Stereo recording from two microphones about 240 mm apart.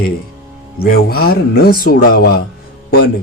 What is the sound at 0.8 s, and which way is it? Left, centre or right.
Speech, left.